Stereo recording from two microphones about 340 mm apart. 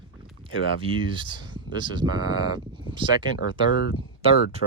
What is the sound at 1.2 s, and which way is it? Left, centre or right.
Speech, centre.